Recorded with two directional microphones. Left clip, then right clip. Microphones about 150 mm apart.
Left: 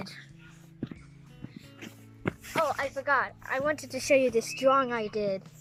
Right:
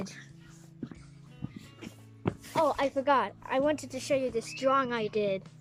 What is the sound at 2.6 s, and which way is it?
Speech, 25° right (ahead or behind).